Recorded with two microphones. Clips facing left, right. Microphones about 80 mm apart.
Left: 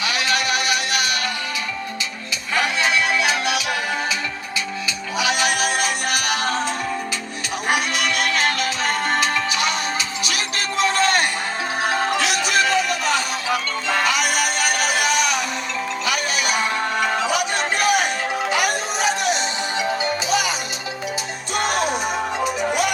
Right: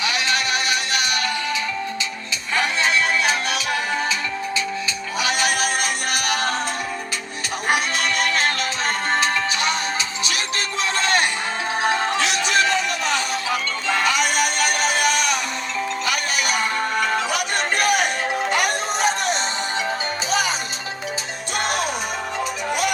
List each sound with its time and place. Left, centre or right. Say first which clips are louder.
0.0 s music: left 1 dB; right
2.6 s music: even; right
5.2 s music: left 1 dB; right
7.7 s music: even; right
11.8 s music: even; right
12.5 s music: left 2 dB; centre
14.9 s music: even; right
17.2 s a sound: left 2 dB; right
18.5 s music: even; right